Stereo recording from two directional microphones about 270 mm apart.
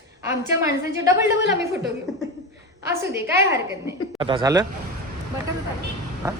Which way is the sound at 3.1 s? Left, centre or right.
Centre.